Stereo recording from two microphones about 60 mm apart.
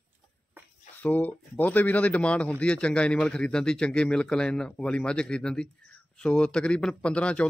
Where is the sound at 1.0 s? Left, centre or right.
Left.